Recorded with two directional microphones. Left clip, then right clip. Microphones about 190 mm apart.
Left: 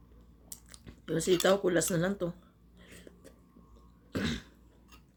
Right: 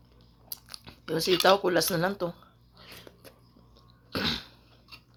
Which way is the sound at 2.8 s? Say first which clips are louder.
Right 5 dB; 15° left (ahead or behind).